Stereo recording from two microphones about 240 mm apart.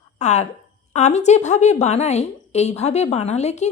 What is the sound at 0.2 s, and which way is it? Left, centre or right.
A woman's voice, left.